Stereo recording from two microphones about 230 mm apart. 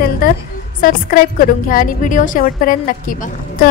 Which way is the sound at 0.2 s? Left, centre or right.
Left.